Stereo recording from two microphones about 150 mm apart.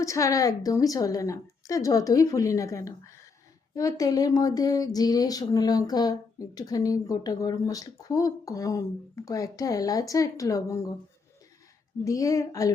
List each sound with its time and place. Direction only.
0.0 s speech: 20° left (ahead or behind)
12.0 s speech: 20° left (ahead or behind)